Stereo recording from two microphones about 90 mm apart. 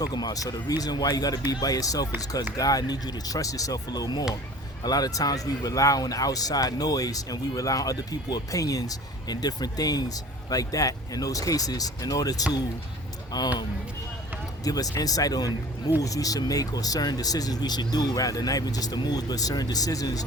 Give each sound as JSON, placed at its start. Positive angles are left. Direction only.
{"t": 0.0, "sound": "speech", "side_deg": 50}
{"t": 14.6, "sound": "speech", "side_deg": 45}